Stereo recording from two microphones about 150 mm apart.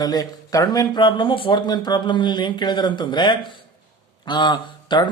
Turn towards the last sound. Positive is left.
turn(degrees=30)  # may be behind; listen again after turning